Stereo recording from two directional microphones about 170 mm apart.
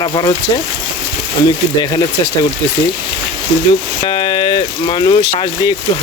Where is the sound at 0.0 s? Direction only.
25° left (ahead or behind).